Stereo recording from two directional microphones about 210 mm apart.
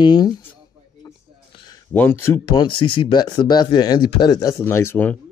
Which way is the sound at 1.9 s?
10° left (ahead or behind).